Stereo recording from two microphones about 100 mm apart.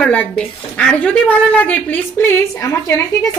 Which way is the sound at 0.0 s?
10° left (ahead or behind).